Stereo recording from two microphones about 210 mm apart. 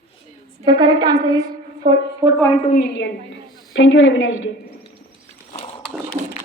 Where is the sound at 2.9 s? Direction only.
55° left (ahead or behind).